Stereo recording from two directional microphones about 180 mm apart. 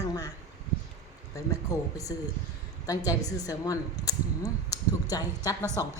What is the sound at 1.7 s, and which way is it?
A woman's voice, 20° left (ahead or behind).